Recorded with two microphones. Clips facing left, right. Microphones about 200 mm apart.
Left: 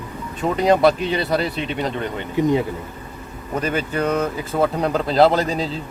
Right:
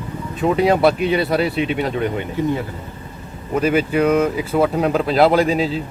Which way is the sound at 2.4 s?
15° left (ahead or behind).